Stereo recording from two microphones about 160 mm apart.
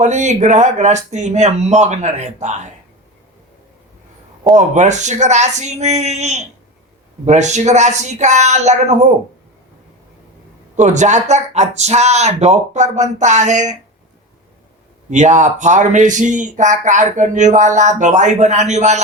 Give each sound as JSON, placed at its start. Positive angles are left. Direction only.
{"t": 0.0, "sound": "speech", "side_deg": -50}
{"t": 4.5, "sound": "speech", "side_deg": -50}
{"t": 10.8, "sound": "speech", "side_deg": -50}
{"t": 15.1, "sound": "speech", "side_deg": -50}